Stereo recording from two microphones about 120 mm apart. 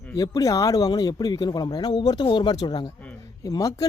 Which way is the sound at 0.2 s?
30° left (ahead or behind).